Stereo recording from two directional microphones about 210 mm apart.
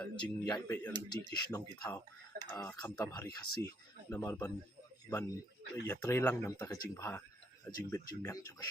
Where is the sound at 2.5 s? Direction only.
5° left (ahead or behind).